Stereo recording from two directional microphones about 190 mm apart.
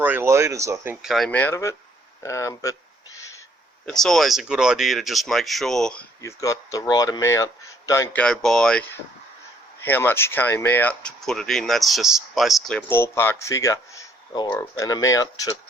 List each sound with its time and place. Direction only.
0.0 s a sound: 10° right (ahead or behind)
1.0 s speech: centre (ahead or behind); by 2.7 s 20° left (ahead or behind)
3.8 s speech: centre (ahead or behind)
6.2 s speech: 15° left (ahead or behind)